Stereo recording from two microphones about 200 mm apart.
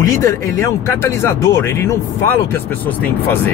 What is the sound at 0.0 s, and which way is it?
Speech, 15° left (ahead or behind).